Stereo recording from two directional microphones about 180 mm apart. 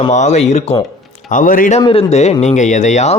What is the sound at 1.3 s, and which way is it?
Speech, 50° left (ahead or behind).